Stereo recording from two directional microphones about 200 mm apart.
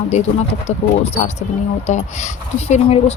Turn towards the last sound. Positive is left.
turn(degrees=30)  # may be behind; listen again after turning